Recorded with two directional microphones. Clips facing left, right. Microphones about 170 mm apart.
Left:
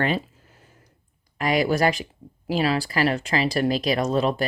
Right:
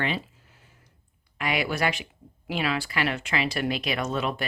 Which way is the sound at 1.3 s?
40° left (ahead or behind).